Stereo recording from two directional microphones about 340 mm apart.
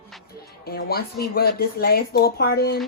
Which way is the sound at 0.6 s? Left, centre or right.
Left.